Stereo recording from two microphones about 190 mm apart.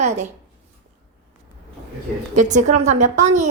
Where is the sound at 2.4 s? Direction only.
40° right (ahead or behind).